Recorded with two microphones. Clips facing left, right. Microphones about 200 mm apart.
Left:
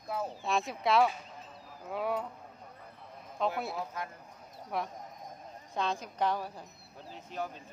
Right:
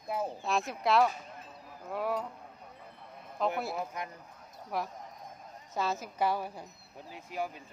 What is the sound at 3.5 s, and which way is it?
Speech, centre (ahead or behind).